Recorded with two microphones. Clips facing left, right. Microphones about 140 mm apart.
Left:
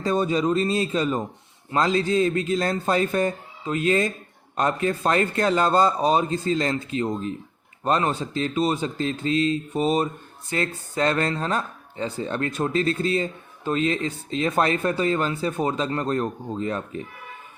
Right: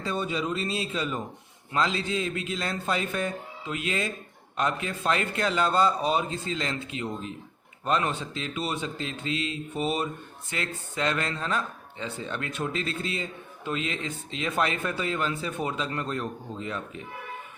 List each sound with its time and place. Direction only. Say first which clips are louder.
0.0 s speech: left 7 dB; 40° left (ahead or behind)